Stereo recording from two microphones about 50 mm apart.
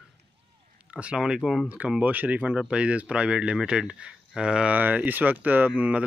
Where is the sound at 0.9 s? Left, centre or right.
Right.